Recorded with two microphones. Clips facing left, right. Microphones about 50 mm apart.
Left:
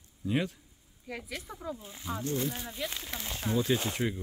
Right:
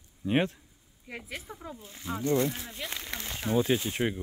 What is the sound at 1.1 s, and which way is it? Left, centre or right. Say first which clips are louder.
Speech: left 1 dB; right.